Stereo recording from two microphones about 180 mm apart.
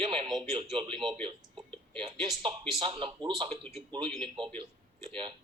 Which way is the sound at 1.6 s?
5° left (ahead or behind).